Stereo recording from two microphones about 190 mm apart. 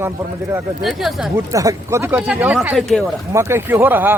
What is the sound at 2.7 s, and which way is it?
Speech, 5° left (ahead or behind).